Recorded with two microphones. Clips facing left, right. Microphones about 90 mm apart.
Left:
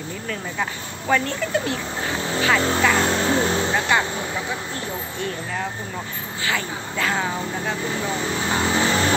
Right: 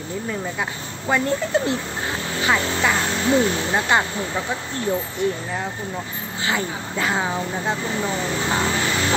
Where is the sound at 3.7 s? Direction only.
25° right (ahead or behind).